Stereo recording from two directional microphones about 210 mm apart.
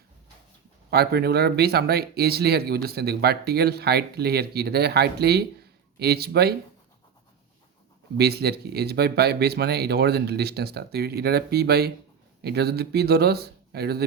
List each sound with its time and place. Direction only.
0.9 s speech: 50° right (ahead or behind)
8.2 s speech: 50° right (ahead or behind)